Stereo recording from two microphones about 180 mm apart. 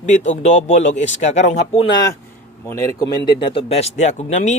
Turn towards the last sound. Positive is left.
turn(degrees=40)  # may be behind; listen again after turning